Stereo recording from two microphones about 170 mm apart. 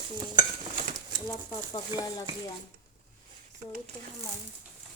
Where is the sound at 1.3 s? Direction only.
20° left (ahead or behind).